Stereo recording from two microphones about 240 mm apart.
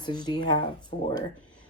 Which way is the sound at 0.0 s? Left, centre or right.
Centre.